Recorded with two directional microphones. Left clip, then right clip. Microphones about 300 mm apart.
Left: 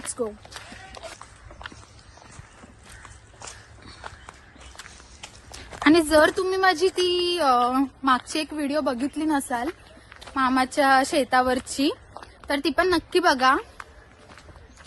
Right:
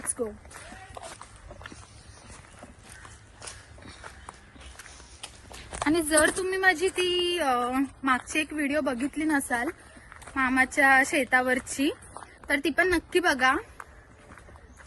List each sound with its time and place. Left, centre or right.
0.2 s speech: centre
4.0 s walk: centre
5.5 s a sound: left
6.1 s speech: centre
11.9 s a sound: centre
12.7 s speech: centre